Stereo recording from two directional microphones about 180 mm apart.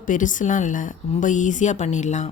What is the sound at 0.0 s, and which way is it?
A woman's voice, 45° left (ahead or behind).